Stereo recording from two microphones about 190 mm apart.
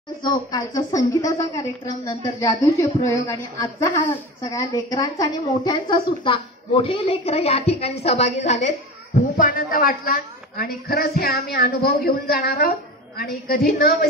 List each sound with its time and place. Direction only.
0.2 s a woman's voice: 20° left (ahead or behind)
9.1 s a woman's voice: 45° left (ahead or behind)